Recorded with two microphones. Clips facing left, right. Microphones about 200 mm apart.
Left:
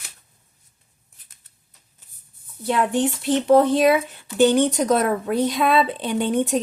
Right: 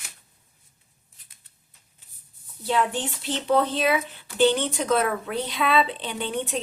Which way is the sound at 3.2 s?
50° left (ahead or behind).